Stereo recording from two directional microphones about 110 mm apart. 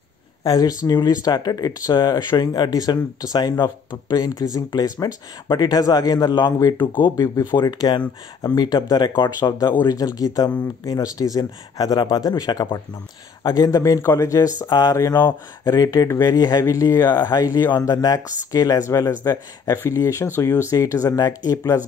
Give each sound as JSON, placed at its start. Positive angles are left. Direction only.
{"t": 0.4, "sound": "speech", "side_deg": 35}